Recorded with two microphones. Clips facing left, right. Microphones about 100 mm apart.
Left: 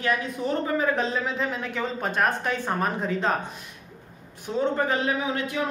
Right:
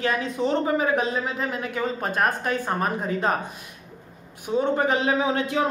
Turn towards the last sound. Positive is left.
turn(degrees=-30)  # may be behind; listen again after turning